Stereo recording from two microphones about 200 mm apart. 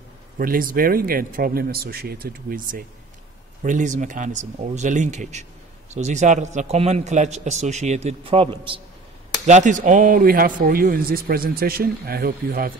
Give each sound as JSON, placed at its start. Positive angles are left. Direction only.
{"t": 0.4, "sound": "a man's voice", "side_deg": -45}
{"t": 9.5, "sound": "a man's voice", "side_deg": -35}